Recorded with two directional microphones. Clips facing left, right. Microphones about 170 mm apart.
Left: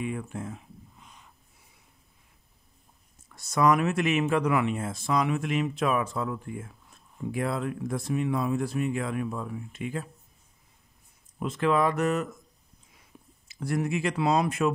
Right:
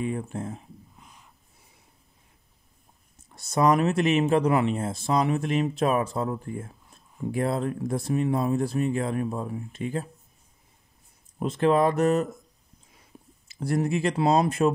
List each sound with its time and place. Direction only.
0.0 s speech: 35° right (ahead or behind)
3.3 s speech: 30° right (ahead or behind)
11.3 s speech: 35° right (ahead or behind)
13.1 s a sound: 35° right (ahead or behind)
13.5 s speech: 35° right (ahead or behind)